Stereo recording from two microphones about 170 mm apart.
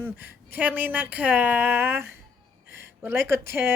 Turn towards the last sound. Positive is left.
turn(degrees=-15)  # may be behind; listen again after turning